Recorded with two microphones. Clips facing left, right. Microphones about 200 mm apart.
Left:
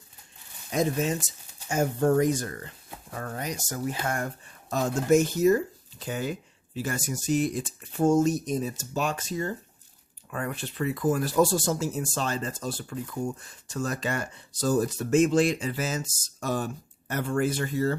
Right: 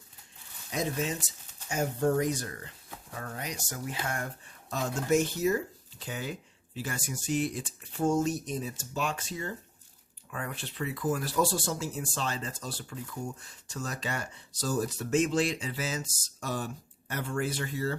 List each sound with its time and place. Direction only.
0.7 s speech: 50° left (ahead or behind)